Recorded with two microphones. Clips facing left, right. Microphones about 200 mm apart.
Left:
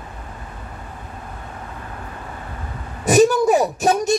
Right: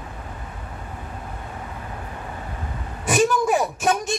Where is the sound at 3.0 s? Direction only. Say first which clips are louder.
Left 6 dB; 40° left (ahead or behind).